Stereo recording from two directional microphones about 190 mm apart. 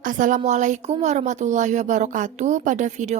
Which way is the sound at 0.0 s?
45° right (ahead or behind).